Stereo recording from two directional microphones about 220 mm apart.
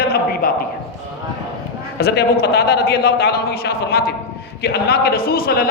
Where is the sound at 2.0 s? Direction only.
45° left (ahead or behind).